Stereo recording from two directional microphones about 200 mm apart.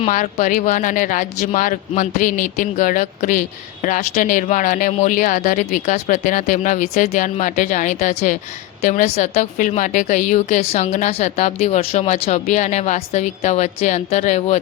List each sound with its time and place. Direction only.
0.0 s a woman's voice: 40° left (ahead or behind)